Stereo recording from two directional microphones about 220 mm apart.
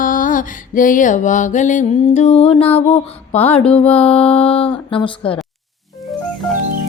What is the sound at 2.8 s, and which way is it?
Speech, 25° left (ahead or behind).